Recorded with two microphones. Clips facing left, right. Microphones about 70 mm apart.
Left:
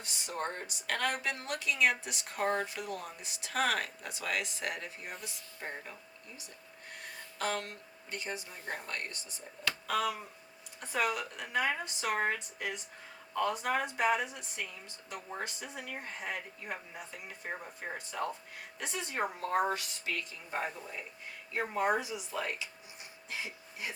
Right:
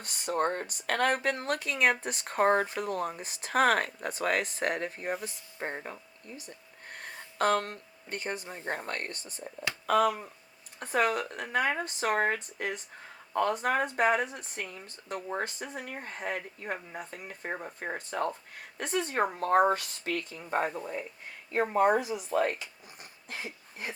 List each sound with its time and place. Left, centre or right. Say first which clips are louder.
0.0 s speech: right 8 dB; right